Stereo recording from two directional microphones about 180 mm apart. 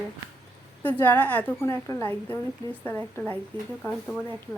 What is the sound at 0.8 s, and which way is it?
A woman's voice, 10° left (ahead or behind).